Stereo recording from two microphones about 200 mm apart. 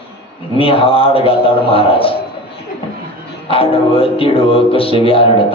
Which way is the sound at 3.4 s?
30° left (ahead or behind).